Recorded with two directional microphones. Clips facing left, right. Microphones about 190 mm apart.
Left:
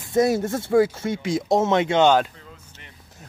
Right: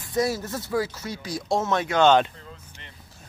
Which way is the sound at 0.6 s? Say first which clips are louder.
Left 8 dB; 25° left (ahead or behind).